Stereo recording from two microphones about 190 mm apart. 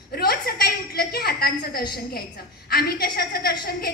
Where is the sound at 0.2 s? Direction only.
55° left (ahead or behind).